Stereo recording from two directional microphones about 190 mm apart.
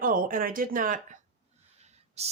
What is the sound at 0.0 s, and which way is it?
Speech, 45° right (ahead or behind).